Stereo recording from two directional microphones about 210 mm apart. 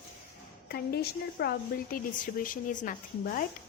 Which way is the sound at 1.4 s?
45° left (ahead or behind).